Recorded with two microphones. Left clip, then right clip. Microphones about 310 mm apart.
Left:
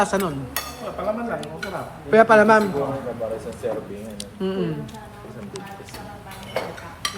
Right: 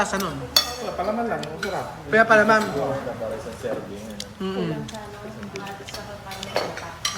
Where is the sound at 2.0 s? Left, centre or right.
Centre.